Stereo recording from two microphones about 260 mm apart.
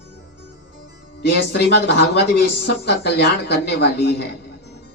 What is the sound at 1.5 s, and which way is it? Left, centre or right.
A woman's voice, left.